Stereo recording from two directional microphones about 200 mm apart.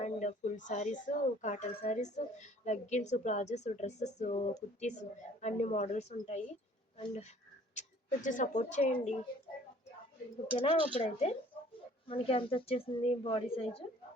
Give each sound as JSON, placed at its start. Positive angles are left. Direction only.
{"t": 0.0, "sound": "speech", "side_deg": 35}
{"t": 10.6, "sound": "a woman's voice", "side_deg": 25}